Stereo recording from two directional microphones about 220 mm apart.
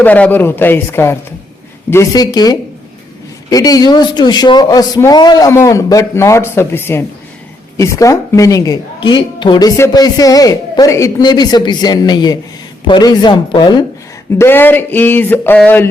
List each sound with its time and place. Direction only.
0.0 s speech: 5° left (ahead or behind)
14.3 s speech: 10° left (ahead or behind)